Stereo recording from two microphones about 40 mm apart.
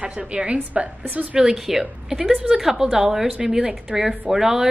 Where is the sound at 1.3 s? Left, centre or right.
Centre.